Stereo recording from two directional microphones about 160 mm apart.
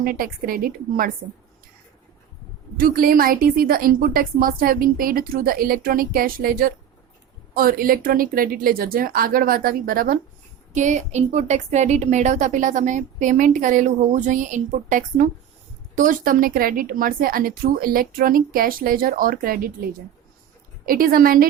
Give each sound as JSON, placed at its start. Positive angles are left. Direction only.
{"t": 0.0, "sound": "a woman's voice", "side_deg": -65}
{"t": 2.7, "sound": "a woman's voice", "side_deg": -65}
{"t": 10.8, "sound": "a woman's voice", "side_deg": -50}
{"t": 20.8, "sound": "a woman's voice", "side_deg": -65}